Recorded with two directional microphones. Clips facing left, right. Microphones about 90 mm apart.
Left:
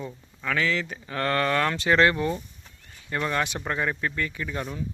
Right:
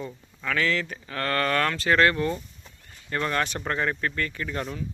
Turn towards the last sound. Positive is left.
turn(degrees=5)  # may be behind; listen again after turning